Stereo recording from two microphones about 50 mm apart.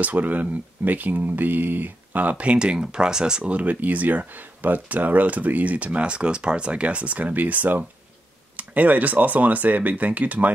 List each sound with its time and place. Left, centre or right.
0.0 s speech: right; by 3.4 s centre
3.4 s speech: right